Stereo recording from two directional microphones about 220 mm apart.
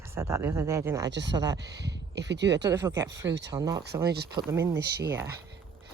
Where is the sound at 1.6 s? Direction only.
50° right (ahead or behind).